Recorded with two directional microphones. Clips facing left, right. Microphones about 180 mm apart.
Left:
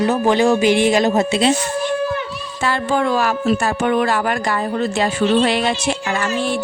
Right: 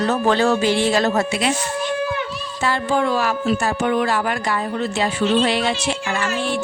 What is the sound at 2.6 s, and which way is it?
Speech, 60° left (ahead or behind).